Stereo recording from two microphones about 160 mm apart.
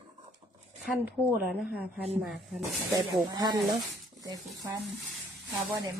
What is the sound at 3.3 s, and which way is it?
Speech, 25° right (ahead or behind).